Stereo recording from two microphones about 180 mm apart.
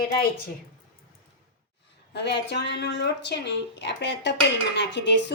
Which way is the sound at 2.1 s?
70° left (ahead or behind).